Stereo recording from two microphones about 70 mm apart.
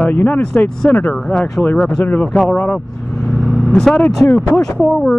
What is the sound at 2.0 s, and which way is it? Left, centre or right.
Speech, left.